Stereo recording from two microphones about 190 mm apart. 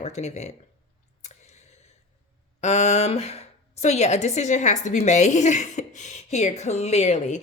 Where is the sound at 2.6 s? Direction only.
35° left (ahead or behind).